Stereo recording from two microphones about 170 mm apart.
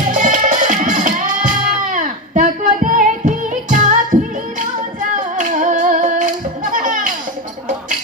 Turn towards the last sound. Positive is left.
turn(degrees=-50)  # may be behind; listen again after turning